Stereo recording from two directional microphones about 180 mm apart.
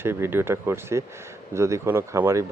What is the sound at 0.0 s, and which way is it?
Speech, 15° right (ahead or behind).